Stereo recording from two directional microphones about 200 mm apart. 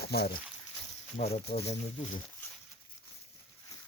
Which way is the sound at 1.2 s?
35° left (ahead or behind).